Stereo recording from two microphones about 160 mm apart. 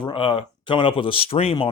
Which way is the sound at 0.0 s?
30° left (ahead or behind).